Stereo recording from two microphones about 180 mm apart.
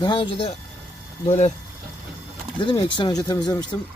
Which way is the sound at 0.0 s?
25° left (ahead or behind).